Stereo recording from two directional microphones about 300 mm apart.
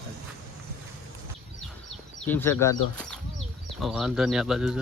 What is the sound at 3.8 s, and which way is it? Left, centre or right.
Speech, centre.